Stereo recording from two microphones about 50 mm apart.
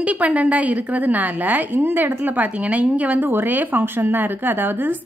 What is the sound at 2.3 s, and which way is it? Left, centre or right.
Speech, right.